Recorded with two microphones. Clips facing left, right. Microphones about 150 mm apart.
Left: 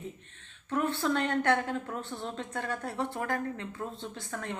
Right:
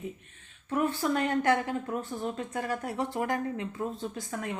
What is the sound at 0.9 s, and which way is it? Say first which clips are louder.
Speech: right 1 dB; 10° right (ahead or behind).